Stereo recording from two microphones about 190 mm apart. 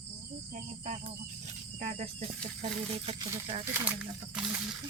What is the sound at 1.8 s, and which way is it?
Speech, 35° right (ahead or behind).